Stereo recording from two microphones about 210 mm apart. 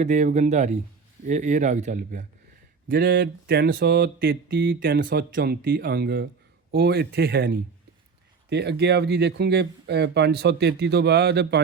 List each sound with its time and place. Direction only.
0.0 s speech: 35° right (ahead or behind)
2.9 s speech: 50° right (ahead or behind)